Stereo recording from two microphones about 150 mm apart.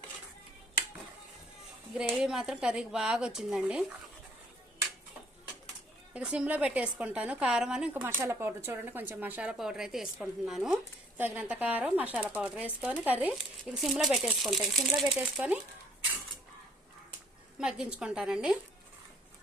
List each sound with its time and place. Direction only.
2.0 s a woman's voice: 5° right (ahead or behind)
6.1 s a woman's voice: 5° right (ahead or behind)
17.6 s a woman's voice: 5° right (ahead or behind)